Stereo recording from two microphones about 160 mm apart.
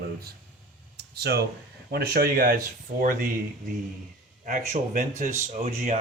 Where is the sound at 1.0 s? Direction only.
90° right.